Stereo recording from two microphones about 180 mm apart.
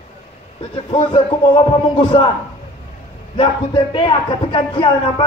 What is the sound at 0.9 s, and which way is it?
Speech, 25° left (ahead or behind).